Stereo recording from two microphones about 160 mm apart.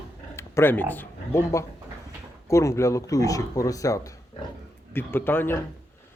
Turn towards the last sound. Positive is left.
turn(degrees=15)  # may be behind; listen again after turning